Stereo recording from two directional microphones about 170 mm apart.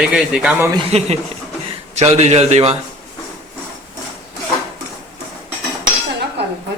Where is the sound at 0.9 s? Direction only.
40° right (ahead or behind).